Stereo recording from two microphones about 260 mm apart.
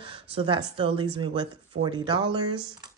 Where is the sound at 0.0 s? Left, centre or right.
Right.